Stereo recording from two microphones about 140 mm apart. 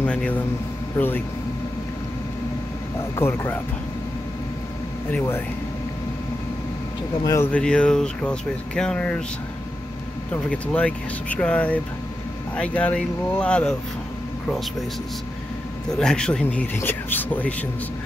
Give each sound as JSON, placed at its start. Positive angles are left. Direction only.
{"t": 0.0, "sound": "speech", "side_deg": 10}
{"t": 3.0, "sound": "speech", "side_deg": 15}
{"t": 7.2, "sound": "speech", "side_deg": 20}
{"t": 7.6, "sound": "speech", "side_deg": 5}
{"t": 10.3, "sound": "speech", "side_deg": 10}
{"t": 16.0, "sound": "speech", "side_deg": 5}